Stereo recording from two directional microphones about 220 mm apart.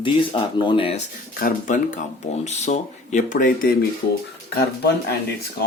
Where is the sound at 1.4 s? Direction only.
35° left (ahead or behind).